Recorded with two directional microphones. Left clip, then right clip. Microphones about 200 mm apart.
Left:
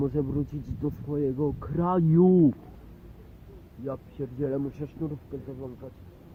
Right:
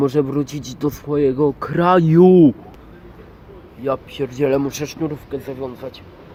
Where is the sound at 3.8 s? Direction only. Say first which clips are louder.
Right 13 dB; 15° right (ahead or behind).